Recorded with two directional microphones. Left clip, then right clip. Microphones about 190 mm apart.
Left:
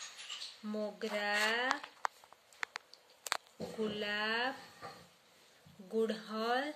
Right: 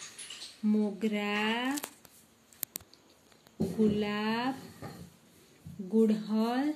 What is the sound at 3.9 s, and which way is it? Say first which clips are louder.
Speech: right 3 dB; centre (ahead or behind).